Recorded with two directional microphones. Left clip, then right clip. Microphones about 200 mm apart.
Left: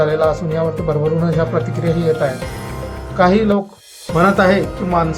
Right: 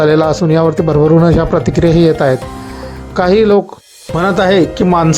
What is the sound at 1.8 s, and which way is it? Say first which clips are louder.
Speech: right 10 dB; 40° right (ahead or behind).